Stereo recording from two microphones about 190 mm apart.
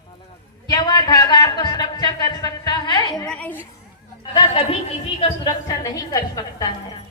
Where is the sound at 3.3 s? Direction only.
10° left (ahead or behind).